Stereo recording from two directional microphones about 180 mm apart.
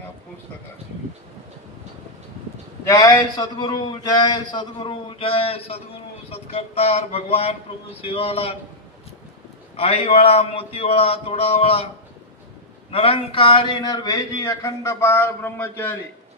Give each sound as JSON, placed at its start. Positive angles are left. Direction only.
{"t": 2.8, "sound": "a man's voice", "side_deg": 20}
{"t": 9.8, "sound": "a man's voice", "side_deg": 30}
{"t": 12.9, "sound": "speech", "side_deg": 30}